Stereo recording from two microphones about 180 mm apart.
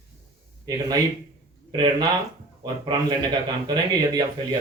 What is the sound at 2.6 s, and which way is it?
A man's voice, 25° right (ahead or behind).